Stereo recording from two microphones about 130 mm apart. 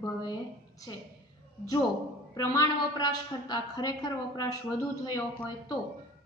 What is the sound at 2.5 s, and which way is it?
A woman's voice, 30° left (ahead or behind).